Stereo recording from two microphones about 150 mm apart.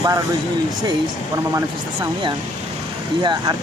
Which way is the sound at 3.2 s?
30° right (ahead or behind).